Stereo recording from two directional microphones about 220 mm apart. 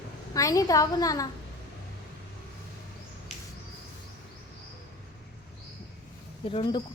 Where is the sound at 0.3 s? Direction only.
15° left (ahead or behind).